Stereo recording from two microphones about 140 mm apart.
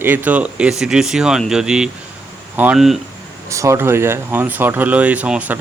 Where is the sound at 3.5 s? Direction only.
20° right (ahead or behind).